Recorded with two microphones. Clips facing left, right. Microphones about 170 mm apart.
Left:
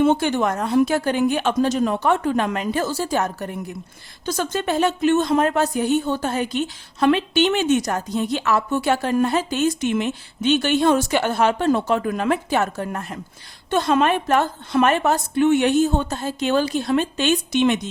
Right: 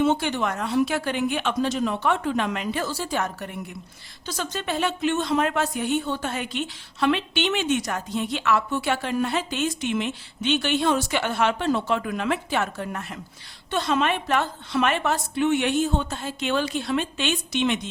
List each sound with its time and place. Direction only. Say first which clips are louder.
0.0 s a woman's voice: left 4 dB; 50° left (ahead or behind)